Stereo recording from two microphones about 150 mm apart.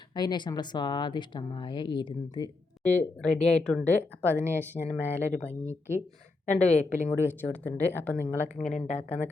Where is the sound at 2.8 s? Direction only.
10° left (ahead or behind).